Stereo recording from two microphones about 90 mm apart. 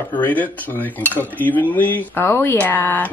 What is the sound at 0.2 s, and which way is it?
Speech, 20° left (ahead or behind).